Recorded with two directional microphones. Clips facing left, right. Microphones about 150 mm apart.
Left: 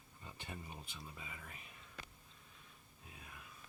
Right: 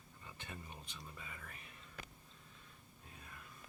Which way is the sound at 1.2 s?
15° left (ahead or behind).